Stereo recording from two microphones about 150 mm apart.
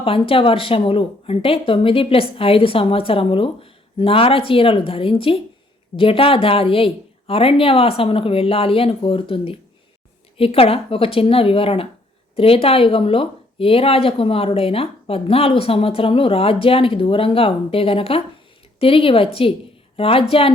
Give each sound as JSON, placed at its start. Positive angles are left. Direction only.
{"t": 0.0, "sound": "a woman's voice", "side_deg": 35}